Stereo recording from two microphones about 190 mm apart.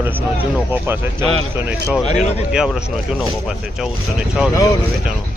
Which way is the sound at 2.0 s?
35° left (ahead or behind).